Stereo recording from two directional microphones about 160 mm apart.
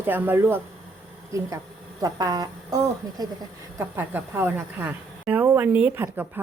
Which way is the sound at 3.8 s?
15° right (ahead or behind).